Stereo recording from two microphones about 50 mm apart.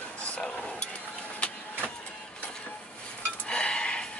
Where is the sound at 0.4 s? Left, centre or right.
Centre.